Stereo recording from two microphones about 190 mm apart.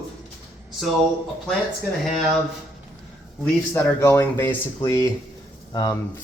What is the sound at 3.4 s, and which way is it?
Speech, 10° left (ahead or behind).